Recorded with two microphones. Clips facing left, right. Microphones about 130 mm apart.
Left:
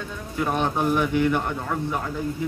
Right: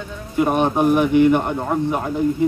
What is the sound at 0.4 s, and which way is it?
Speech, 20° right (ahead or behind).